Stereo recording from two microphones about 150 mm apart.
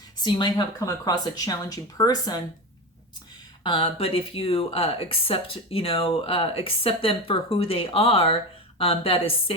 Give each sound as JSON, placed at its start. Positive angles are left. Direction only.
{"t": 0.2, "sound": "speech", "side_deg": 30}
{"t": 3.6, "sound": "speech", "side_deg": 35}